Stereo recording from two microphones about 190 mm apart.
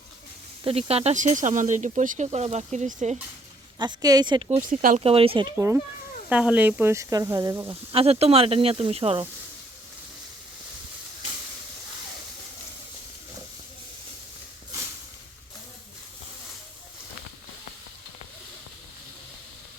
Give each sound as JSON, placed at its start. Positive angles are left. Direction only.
{"t": 0.6, "sound": "speech", "side_deg": -30}
{"t": 3.8, "sound": "a woman's voice", "side_deg": -20}
{"t": 4.5, "sound": "speech", "side_deg": -45}
{"t": 4.9, "sound": "a woman's voice", "side_deg": -30}
{"t": 5.5, "sound": "speech", "side_deg": -15}
{"t": 7.7, "sound": "speech", "side_deg": -30}